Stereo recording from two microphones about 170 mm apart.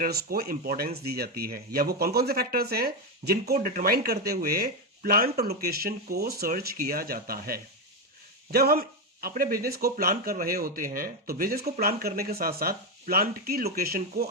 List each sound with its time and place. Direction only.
0.0 s speech: 60° right (ahead or behind)